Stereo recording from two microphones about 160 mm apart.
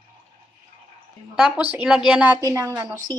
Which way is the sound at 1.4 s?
5° right (ahead or behind).